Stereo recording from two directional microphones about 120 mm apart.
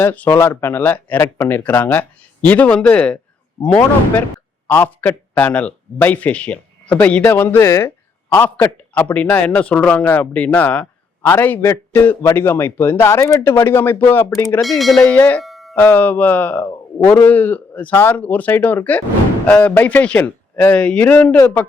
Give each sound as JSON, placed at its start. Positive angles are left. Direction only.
{"t": 0.0, "sound": "a man's voice", "side_deg": 15}
{"t": 14.6, "sound": "speech", "side_deg": 0}
{"t": 15.0, "sound": "a man's voice", "side_deg": 15}
{"t": 15.4, "sound": "a sound", "side_deg": 0}
{"t": 15.7, "sound": "a man's voice", "side_deg": 15}